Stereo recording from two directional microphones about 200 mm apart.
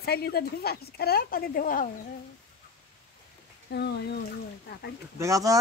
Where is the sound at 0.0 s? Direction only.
50° left (ahead or behind).